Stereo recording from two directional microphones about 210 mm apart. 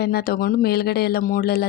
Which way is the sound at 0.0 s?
45° left (ahead or behind).